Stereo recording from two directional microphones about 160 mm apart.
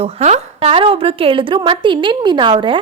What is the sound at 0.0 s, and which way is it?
A woman's voice, 45° right (ahead or behind).